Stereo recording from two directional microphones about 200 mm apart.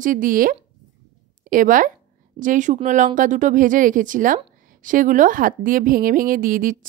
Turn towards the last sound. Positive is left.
turn(degrees=-45)  # may be behind; listen again after turning